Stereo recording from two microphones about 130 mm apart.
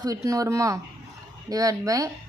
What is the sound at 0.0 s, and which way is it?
Speech, 25° right (ahead or behind).